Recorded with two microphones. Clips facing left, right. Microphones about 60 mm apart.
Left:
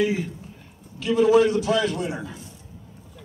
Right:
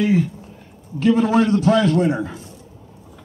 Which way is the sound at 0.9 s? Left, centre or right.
Right.